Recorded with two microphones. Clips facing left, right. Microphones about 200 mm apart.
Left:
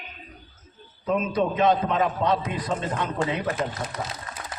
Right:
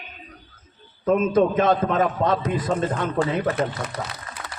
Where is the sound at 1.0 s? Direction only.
50° right (ahead or behind).